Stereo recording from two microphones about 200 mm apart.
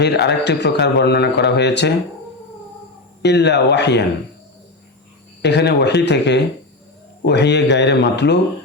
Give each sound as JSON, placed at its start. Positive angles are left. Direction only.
{"t": 0.0, "sound": "a man's voice", "side_deg": 55}
{"t": 3.2, "sound": "a man's voice", "side_deg": 55}
{"t": 5.4, "sound": "a man's voice", "side_deg": 60}